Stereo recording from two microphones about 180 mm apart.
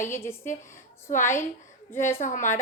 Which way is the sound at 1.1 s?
45° left (ahead or behind).